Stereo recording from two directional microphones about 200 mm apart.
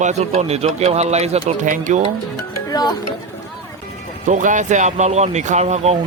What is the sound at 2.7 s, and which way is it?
Speech, 20° left (ahead or behind).